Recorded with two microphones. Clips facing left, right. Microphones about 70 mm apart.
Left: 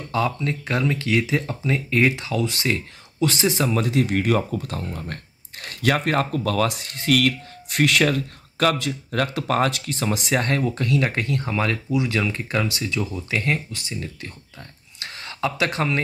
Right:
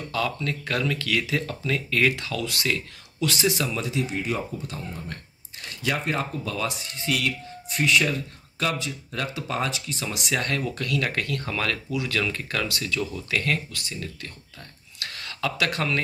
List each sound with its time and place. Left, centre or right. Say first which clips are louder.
0.1 s speech: left 5 dB; left
3.7 s speech: left 7 dB; left
15.0 s a sound: left 4 dB; left